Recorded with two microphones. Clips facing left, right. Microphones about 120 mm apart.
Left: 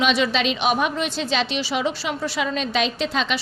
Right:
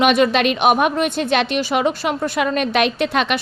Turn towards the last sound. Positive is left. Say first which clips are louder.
# right 5 dB
turn(degrees=-60)  # may be behind; listen again after turning